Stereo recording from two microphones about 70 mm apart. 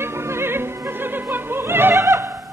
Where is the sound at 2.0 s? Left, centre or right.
Right.